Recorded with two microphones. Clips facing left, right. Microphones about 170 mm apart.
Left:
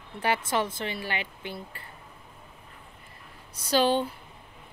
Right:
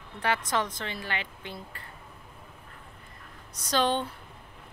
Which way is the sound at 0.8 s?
5° left (ahead or behind).